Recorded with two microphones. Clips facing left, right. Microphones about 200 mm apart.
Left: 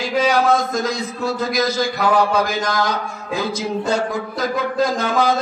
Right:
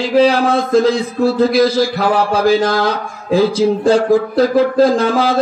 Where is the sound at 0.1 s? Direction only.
30° right (ahead or behind).